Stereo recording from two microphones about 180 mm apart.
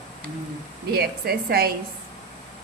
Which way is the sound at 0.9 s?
60° right (ahead or behind).